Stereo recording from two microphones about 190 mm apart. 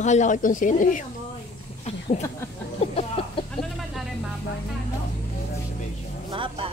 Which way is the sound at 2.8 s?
30° left (ahead or behind).